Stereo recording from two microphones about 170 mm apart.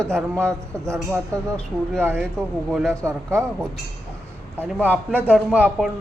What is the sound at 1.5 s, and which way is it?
Speech, 5° left (ahead or behind).